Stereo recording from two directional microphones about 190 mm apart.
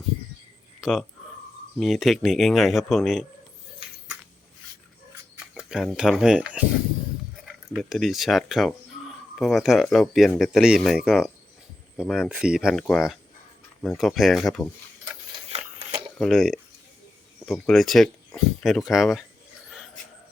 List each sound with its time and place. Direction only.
0.8 s speech: centre (ahead or behind)
5.5 s speech: 5° right (ahead or behind)
7.7 s speech: centre (ahead or behind)
15.4 s a sound: 30° right (ahead or behind)
16.1 s speech: centre (ahead or behind)